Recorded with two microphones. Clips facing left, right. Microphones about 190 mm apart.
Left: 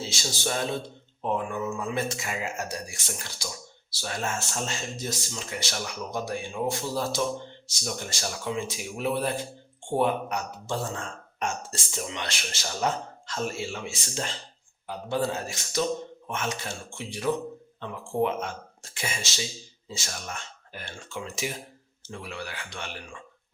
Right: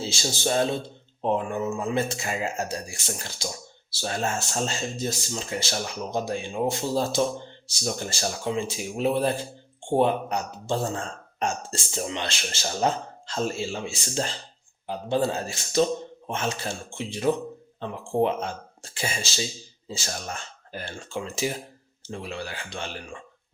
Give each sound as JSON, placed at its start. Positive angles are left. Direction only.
{"t": 0.0, "sound": "speech", "side_deg": -30}